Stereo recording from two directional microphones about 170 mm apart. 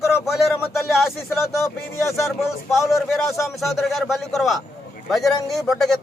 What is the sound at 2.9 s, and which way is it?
A man's voice, centre (ahead or behind).